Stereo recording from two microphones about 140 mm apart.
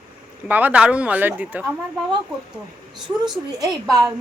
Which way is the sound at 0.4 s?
10° right (ahead or behind).